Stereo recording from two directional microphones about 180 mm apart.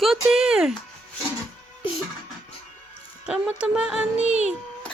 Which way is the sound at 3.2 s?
5° right (ahead or behind).